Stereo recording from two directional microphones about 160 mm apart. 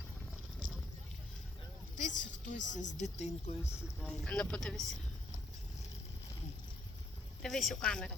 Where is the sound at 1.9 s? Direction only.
50° left (ahead or behind).